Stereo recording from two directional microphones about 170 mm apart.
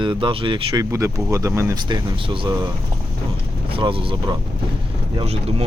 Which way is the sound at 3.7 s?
30° right (ahead or behind).